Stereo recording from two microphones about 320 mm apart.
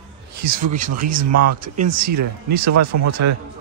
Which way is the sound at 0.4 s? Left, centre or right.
Right.